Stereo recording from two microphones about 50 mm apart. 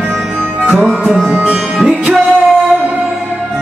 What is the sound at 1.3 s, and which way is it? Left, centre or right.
Music, right.